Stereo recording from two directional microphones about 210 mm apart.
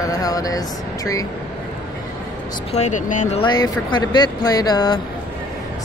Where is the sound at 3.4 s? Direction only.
20° left (ahead or behind).